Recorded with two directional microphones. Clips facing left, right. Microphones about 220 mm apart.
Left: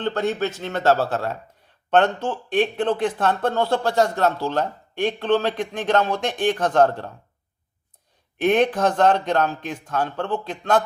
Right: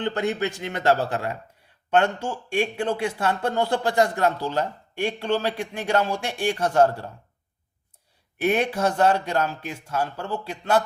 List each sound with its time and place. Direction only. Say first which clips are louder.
0.0 s speech: left 2 dB; 15° right (ahead or behind)
8.4 s speech: left 4 dB; 10° right (ahead or behind)